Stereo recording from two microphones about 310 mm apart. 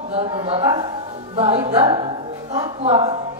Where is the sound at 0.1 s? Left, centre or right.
Centre.